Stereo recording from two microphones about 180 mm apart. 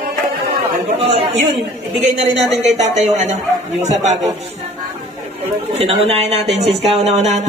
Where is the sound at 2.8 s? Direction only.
40° right (ahead or behind).